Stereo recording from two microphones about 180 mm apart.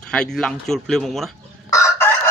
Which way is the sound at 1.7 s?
15° left (ahead or behind).